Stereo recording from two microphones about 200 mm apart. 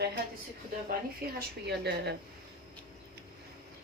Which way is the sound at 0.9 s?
50° right (ahead or behind).